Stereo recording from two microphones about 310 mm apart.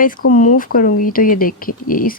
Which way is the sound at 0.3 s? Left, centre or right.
Left.